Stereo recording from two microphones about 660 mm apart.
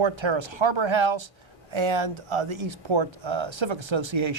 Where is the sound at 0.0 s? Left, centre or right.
Right.